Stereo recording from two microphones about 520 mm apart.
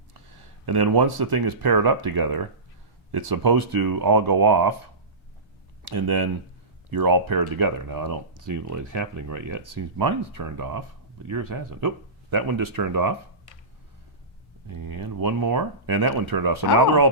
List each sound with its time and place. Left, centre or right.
0.6 s speech: right
5.8 s speech: right
14.7 s speech: right